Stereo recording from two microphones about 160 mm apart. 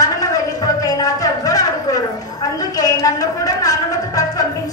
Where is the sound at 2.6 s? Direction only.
25° left (ahead or behind).